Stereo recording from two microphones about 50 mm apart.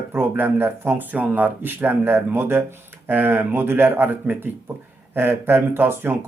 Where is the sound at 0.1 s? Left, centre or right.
Right.